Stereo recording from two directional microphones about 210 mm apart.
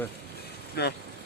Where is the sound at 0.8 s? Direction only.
50° left (ahead or behind).